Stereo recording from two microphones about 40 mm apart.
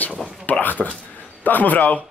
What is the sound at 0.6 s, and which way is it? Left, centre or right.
A man's voice, left.